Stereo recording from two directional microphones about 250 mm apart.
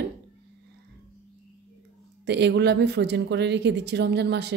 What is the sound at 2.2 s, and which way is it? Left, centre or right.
Speech, right.